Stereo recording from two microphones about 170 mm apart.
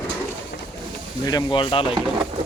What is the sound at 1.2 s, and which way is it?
Speech, 25° left (ahead or behind).